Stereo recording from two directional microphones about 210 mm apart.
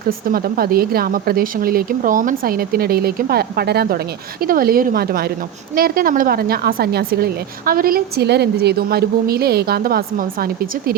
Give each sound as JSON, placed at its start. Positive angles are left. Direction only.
{"t": 0.3, "sound": "a woman's voice", "side_deg": -45}